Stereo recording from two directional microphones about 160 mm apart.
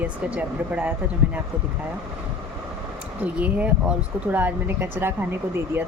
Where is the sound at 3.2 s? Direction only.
10° right (ahead or behind).